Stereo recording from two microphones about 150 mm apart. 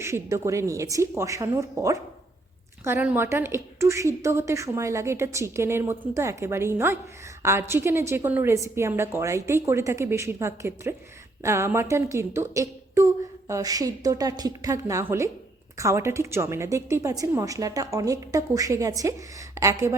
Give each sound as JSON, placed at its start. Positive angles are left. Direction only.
{"t": 0.0, "sound": "a woman's voice", "side_deg": -20}